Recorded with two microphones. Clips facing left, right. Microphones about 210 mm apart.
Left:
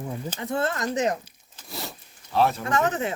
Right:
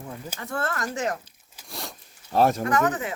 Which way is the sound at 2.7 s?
25° left (ahead or behind).